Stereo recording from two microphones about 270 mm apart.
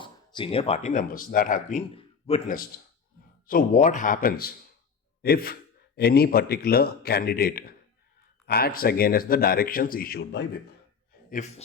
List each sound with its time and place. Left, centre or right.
0.0 s speech: centre; by 10.6 s left
11.3 s a man's voice: left